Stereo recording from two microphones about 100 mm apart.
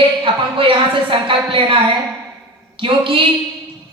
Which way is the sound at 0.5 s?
60° right (ahead or behind).